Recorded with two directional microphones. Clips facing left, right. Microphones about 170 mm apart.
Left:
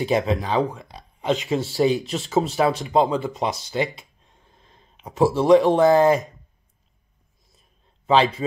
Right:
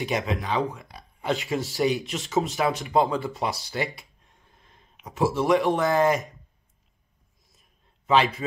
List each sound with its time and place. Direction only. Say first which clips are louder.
0.0 s speech: left 6 dB; 35° left (ahead or behind)
8.1 s speech: left 3 dB; 30° left (ahead or behind)